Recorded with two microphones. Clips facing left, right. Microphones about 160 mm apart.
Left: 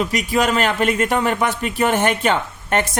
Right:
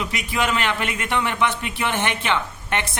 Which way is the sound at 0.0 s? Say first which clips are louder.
Left 6 dB; 40° left (ahead or behind).